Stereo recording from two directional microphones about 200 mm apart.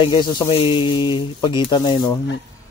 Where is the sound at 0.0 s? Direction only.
20° left (ahead or behind).